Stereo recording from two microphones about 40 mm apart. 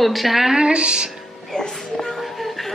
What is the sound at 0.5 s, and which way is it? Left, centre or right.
Speech, right.